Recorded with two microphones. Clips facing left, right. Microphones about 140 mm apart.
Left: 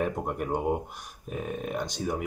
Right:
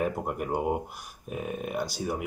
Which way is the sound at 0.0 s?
5° right (ahead or behind).